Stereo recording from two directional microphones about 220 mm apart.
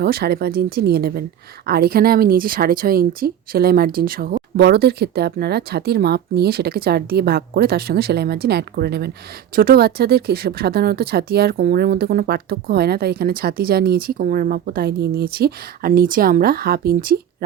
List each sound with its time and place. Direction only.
0.0 s speech: 45° right (ahead or behind)